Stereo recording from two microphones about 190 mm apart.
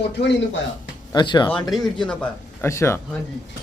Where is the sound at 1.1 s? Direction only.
25° left (ahead or behind).